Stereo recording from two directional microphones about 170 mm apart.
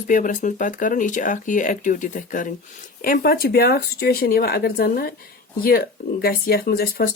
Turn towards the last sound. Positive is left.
turn(degrees=65)  # may be behind; listen again after turning